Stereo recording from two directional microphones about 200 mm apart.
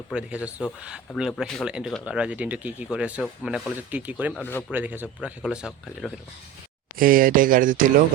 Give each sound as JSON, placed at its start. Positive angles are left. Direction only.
{"t": 0.1, "sound": "speech", "side_deg": -5}
{"t": 6.9, "sound": "speech", "side_deg": -45}